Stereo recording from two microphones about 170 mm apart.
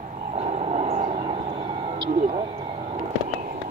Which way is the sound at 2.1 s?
50° right (ahead or behind).